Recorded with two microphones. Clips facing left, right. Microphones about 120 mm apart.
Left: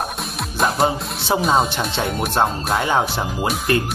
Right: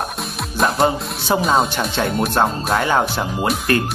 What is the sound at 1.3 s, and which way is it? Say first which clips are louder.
Speech: right 1 dB; centre (ahead or behind).